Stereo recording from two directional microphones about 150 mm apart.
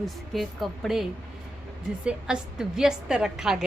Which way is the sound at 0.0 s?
Centre (ahead or behind).